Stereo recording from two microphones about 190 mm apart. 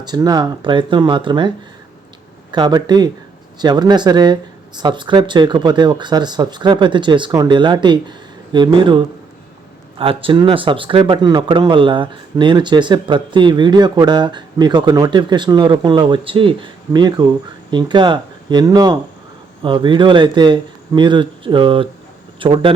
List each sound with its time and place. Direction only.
0.0 s speech: 20° right (ahead or behind)